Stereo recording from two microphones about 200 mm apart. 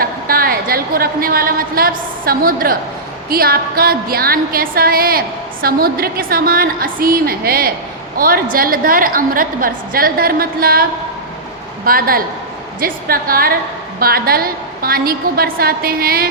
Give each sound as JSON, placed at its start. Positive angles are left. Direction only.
{"t": 0.0, "sound": "a woman's voice", "side_deg": -45}
{"t": 11.9, "sound": "a woman's voice", "side_deg": -45}